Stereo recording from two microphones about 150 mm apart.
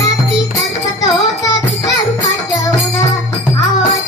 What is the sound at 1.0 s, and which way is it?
Music, 25° left (ahead or behind).